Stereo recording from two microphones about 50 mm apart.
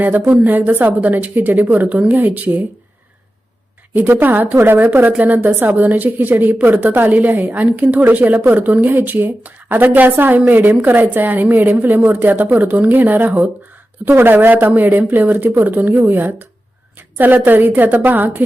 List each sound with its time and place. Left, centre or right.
0.0 s a woman's voice: right
3.9 s a woman's voice: right